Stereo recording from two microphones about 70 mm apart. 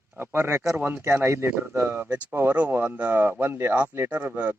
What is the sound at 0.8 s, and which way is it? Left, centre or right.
Speech, right.